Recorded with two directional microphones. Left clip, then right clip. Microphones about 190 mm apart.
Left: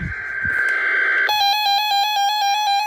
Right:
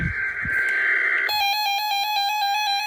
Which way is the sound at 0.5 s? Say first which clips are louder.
Left 2 dB; 40° left (ahead or behind).